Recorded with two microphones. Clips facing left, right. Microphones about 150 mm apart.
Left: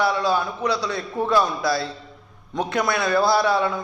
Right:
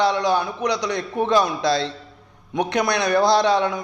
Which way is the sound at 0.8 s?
70° right (ahead or behind).